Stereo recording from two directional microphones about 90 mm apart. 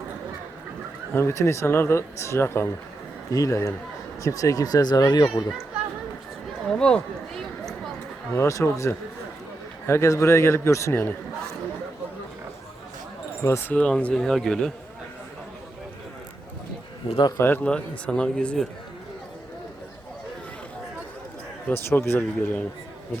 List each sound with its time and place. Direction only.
1.1 s speech: 30° left (ahead or behind); by 5.5 s 45° left (ahead or behind)
6.7 s speech: 10° left (ahead or behind)
8.4 s speech: 35° left (ahead or behind)
13.4 s speech: 30° left (ahead or behind)
13.7 s speech: 15° left (ahead or behind)
17.3 s a man's voice: 25° left (ahead or behind)
17.6 s speech: 15° left (ahead or behind)
21.7 s a man's voice: 25° left (ahead or behind)